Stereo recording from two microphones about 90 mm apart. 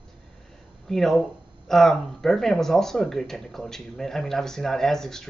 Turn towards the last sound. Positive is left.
turn(degrees=5)  # may be behind; listen again after turning